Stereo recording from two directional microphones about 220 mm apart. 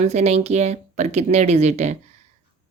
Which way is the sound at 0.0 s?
30° right (ahead or behind).